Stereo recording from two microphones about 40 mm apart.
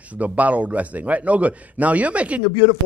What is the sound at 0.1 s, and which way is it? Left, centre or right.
A man's voice, right.